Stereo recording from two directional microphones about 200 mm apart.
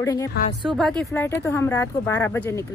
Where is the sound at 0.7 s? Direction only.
Centre (ahead or behind).